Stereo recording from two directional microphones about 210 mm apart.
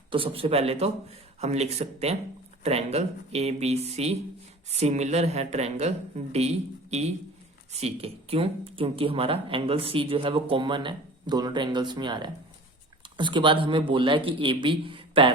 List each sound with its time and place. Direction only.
0.1 s speech: 25° right (ahead or behind)